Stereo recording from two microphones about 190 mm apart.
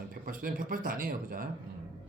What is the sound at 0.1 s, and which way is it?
Speech, 45° right (ahead or behind).